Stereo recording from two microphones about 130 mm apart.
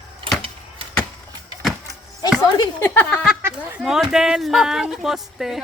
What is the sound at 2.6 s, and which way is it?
Speech, 20° left (ahead or behind).